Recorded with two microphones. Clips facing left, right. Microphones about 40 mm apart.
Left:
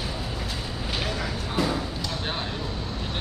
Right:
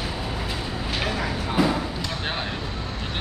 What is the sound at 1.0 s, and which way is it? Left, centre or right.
Vehicle, right.